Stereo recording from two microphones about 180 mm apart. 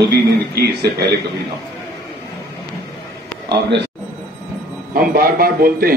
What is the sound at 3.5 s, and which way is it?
Speech, 75° right (ahead or behind).